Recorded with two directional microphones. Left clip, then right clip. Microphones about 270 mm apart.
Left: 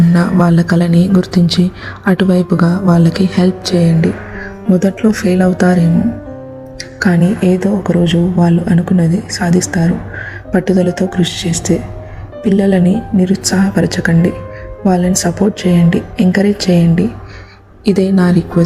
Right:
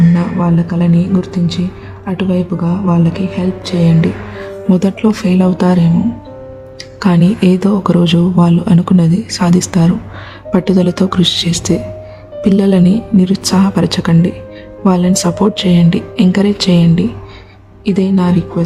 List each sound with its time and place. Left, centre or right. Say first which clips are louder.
0.1 s speech: left 3 dB; centre
7.0 s speech: even; centre
17.8 s speech: left 2 dB; centre